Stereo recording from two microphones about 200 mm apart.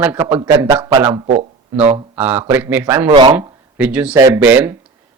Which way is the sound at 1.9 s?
10° right (ahead or behind).